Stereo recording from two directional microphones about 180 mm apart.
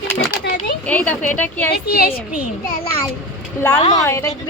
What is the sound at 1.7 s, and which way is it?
Speech, 60° left (ahead or behind).